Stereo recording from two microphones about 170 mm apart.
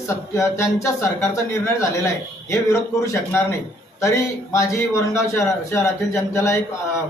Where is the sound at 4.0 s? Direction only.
15° left (ahead or behind).